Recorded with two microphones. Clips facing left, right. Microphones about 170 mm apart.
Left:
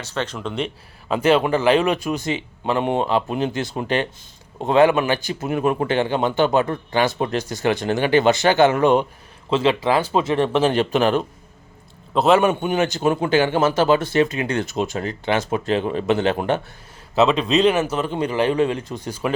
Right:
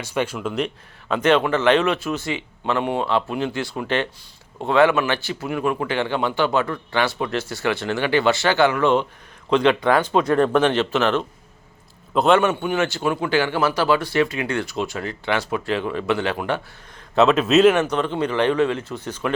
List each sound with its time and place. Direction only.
0.0 s speech: 10° right (ahead or behind)
1.0 s speech: 10° left (ahead or behind)
12.1 s a man's voice: centre (ahead or behind)
12.4 s speech: 15° left (ahead or behind)
17.2 s speech: centre (ahead or behind)